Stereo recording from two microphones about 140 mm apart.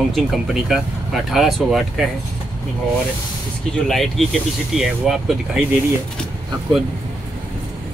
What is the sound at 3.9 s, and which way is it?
Speech, centre (ahead or behind).